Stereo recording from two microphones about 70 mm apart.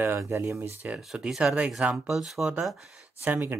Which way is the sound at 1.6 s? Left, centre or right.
Centre.